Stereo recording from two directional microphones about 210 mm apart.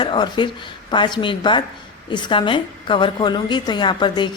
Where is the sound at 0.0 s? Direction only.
20° left (ahead or behind).